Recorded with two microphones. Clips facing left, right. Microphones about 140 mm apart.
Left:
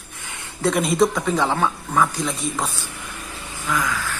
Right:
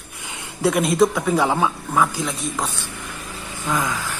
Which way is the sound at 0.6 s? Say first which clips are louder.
Right 1 dB; centre (ahead or behind).